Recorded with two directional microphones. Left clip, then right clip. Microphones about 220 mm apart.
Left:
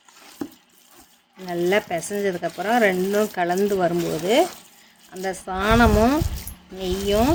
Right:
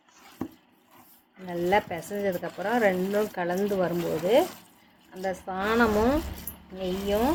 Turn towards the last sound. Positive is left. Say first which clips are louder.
# left 5 dB
turn(degrees=45)  # may be behind; listen again after turning